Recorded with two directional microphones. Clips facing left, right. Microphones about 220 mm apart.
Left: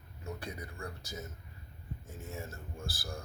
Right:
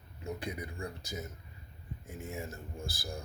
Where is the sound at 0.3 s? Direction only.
15° right (ahead or behind).